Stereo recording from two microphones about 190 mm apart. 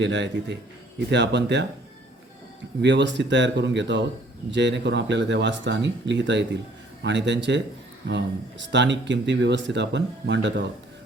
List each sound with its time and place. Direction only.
0.0 s speech: 70° right (ahead or behind)
2.8 s speech: 70° right (ahead or behind)